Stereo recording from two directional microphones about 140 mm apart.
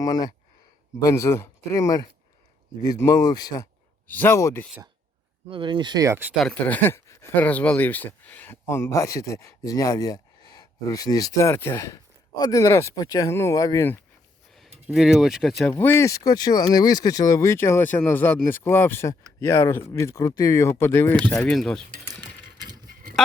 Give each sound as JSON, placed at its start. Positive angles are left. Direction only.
{"t": 0.0, "sound": "speech", "side_deg": 25}
{"t": 4.1, "sound": "speech", "side_deg": 15}
{"t": 5.5, "sound": "speech", "side_deg": -35}
{"t": 6.3, "sound": "speech", "side_deg": 5}
{"t": 14.8, "sound": "speech", "side_deg": -5}
{"t": 15.6, "sound": "speech", "side_deg": 15}
{"t": 21.2, "sound": "speech", "side_deg": 5}
{"t": 22.2, "sound": "sewing machine", "side_deg": -30}